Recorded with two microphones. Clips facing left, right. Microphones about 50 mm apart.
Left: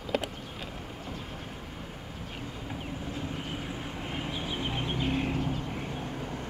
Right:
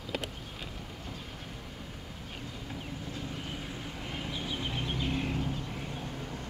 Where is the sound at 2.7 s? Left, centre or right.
Centre.